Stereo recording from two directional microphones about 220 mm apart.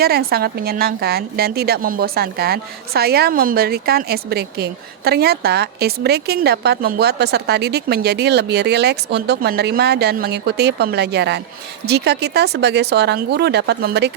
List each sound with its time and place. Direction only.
0.0 s a woman's voice: 45° right (ahead or behind)